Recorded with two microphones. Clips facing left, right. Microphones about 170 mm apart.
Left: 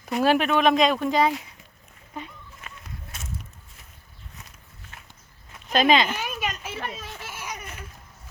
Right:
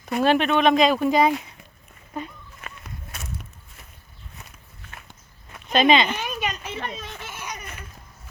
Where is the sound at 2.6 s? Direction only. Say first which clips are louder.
Right 3 dB; 60° right (ahead or behind).